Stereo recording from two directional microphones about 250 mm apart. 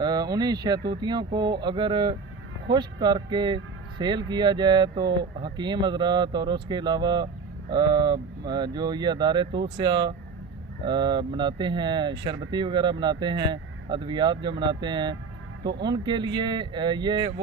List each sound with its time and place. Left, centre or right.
0.0 s speech: centre